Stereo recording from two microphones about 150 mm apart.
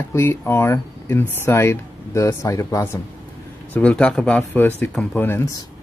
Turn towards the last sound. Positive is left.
turn(degrees=15)  # may be behind; listen again after turning